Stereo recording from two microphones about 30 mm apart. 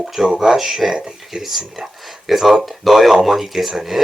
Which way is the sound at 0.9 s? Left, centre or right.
Right.